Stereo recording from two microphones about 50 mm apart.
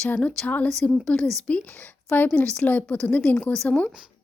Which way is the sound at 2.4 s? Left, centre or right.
Left.